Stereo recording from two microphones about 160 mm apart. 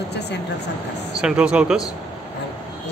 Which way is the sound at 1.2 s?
5° right (ahead or behind).